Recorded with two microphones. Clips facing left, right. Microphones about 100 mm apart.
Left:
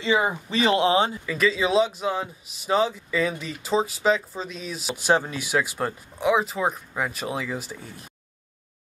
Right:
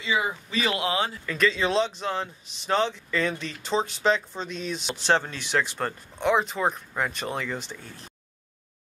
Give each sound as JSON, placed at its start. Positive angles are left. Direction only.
{"t": 0.0, "sound": "speech", "side_deg": 30}
{"t": 1.2, "sound": "a man's voice", "side_deg": 5}